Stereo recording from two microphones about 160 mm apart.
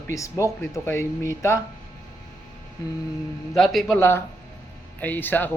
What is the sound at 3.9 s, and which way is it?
Speech, 15° left (ahead or behind).